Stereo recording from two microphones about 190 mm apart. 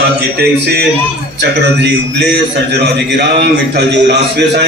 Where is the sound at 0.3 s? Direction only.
55° right (ahead or behind).